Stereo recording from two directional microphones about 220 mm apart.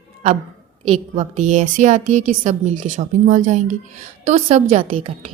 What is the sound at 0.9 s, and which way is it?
A woman's voice, 30° right (ahead or behind).